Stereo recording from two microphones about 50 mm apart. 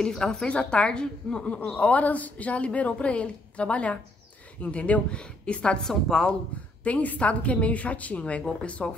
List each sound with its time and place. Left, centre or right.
0.1 s speech: centre
0.5 s a woman's voice: left
5.9 s speech: centre
6.8 s a woman's voice: left